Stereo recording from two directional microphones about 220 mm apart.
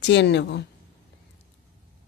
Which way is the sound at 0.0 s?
50° left (ahead or behind).